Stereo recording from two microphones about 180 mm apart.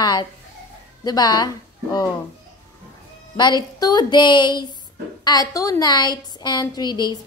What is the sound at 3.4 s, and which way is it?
A woman's voice, 25° left (ahead or behind).